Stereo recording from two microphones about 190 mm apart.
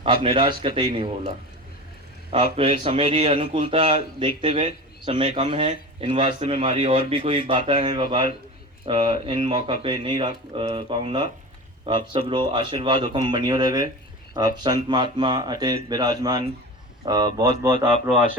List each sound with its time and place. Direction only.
0.0 s speech: 30° right (ahead or behind)
2.3 s speech: 30° right (ahead or behind)